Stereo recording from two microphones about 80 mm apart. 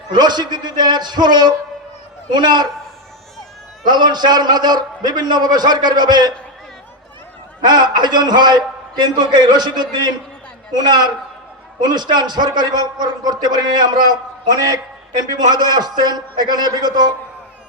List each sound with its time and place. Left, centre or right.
0.1 s a man's voice: right
3.8 s a man's voice: right
7.6 s a man's voice: right
10.7 s a man's voice: right